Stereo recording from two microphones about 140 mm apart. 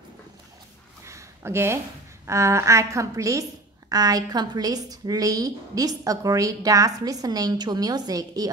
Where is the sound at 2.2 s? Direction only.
20° right (ahead or behind).